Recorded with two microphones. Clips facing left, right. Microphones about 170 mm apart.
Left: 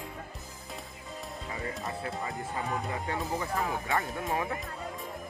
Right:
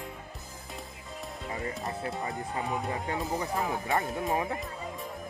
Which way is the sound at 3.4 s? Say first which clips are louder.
Right 1 dB; 20° right (ahead or behind).